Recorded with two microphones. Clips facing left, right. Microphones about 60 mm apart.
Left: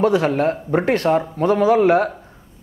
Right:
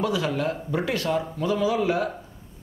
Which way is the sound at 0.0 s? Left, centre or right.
Left.